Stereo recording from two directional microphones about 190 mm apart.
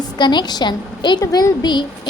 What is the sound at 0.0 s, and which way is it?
A woman's voice, 25° left (ahead or behind).